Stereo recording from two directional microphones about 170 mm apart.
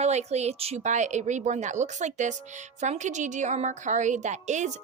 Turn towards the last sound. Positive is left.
turn(degrees=-45)  # may be behind; listen again after turning